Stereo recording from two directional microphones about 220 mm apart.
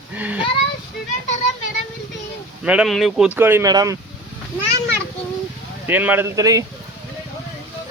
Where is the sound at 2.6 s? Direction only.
5° right (ahead or behind).